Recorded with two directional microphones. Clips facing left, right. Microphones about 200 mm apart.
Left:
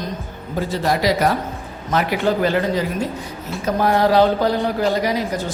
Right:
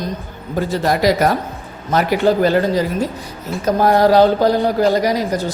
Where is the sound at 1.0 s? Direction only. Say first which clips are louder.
Right 3 dB; 45° right (ahead or behind).